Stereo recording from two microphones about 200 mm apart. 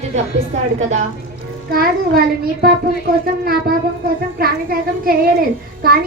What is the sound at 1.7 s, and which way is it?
A child's voice, 45° right (ahead or behind).